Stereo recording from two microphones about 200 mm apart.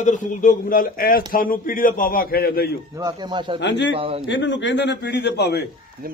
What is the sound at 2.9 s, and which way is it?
Speech, 20° right (ahead or behind).